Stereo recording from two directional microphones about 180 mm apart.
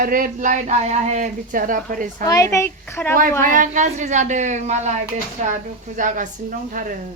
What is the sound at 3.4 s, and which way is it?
A woman's voice, 45° right (ahead or behind).